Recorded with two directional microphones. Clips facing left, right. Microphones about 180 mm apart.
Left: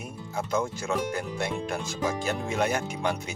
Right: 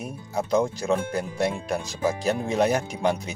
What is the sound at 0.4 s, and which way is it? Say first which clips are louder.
Speech: right 6 dB; 35° right (ahead or behind).